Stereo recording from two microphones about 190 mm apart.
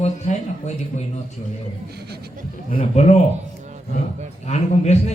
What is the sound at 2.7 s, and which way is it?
Speech, 40° left (ahead or behind).